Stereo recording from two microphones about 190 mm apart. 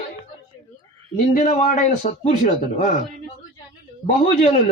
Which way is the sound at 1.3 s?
40° left (ahead or behind).